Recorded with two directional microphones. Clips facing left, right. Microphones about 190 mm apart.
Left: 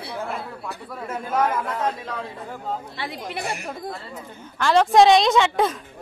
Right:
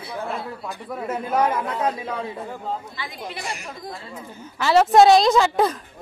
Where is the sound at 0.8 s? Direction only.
5° right (ahead or behind).